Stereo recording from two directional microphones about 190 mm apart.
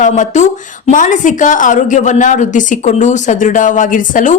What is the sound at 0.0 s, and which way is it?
Speech, 40° left (ahead or behind).